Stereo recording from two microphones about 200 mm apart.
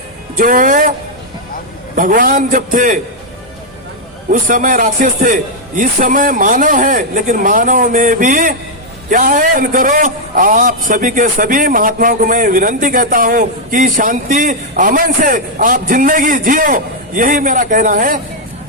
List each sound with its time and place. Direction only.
0.3 s a man's voice: 45° right (ahead or behind)
2.0 s a man's voice: 45° right (ahead or behind)
4.3 s a man's voice: 40° right (ahead or behind)